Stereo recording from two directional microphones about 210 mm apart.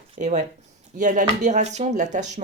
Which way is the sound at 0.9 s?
35° right (ahead or behind).